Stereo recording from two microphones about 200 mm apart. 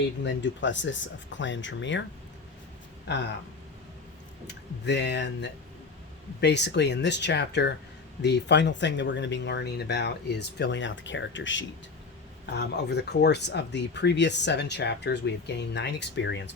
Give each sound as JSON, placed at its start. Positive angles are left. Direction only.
{"t": 0.3, "sound": "speech", "side_deg": 65}
{"t": 4.4, "sound": "speech", "side_deg": 60}
{"t": 12.5, "sound": "speech", "side_deg": 55}